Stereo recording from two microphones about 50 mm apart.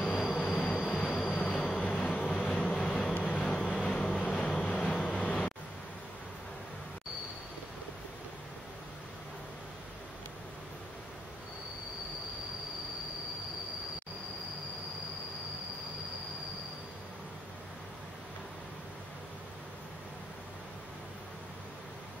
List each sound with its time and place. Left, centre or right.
0.0 s vehicle: left
0.8 s train: left
1.9 s vehicle: left